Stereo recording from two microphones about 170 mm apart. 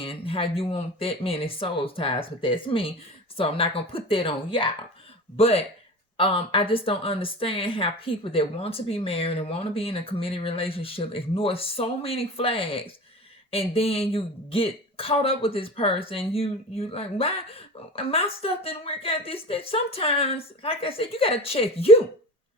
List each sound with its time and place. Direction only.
0.0 s speech: 35° left (ahead or behind)